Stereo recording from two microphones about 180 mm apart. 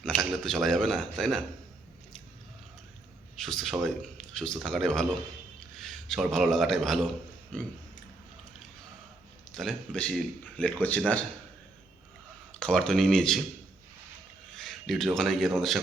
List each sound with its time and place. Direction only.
0.0 s a man's voice: 5° left (ahead or behind)
3.3 s a man's voice: centre (ahead or behind)
9.6 s speech: 5° left (ahead or behind)
12.5 s a man's voice: 5° left (ahead or behind)
14.5 s a man's voice: centre (ahead or behind)